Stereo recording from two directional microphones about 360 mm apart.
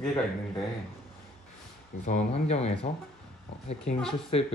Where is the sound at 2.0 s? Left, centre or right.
Centre.